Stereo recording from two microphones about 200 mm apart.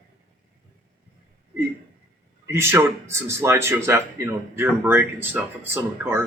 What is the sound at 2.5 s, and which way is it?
Speech, 15° right (ahead or behind).